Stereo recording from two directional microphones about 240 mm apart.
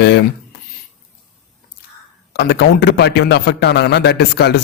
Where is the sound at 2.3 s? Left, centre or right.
Left.